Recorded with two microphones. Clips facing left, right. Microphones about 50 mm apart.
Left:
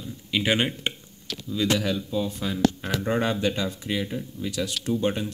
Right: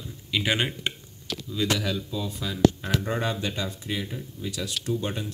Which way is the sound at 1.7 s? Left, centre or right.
Left.